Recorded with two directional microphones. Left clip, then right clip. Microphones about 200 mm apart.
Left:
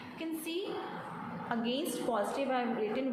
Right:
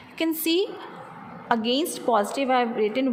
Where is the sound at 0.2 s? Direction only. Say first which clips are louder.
Right 14 dB; 50° right (ahead or behind).